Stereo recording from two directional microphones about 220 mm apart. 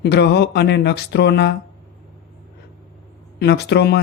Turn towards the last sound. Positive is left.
turn(degrees=50)  # may be behind; listen again after turning